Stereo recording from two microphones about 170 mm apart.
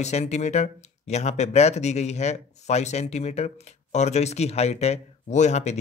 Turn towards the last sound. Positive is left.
turn(degrees=40)  # may be behind; listen again after turning